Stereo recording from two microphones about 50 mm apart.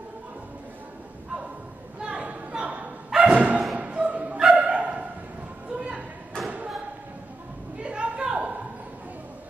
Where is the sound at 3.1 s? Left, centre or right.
Centre.